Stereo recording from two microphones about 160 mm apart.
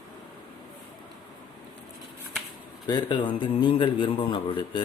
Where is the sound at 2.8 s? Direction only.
30° left (ahead or behind).